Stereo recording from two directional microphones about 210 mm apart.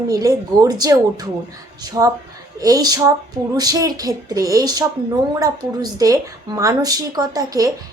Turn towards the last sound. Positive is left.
turn(degrees=-15)  # may be behind; listen again after turning